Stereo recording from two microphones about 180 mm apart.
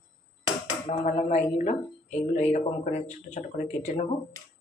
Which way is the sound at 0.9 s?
40° left (ahead or behind).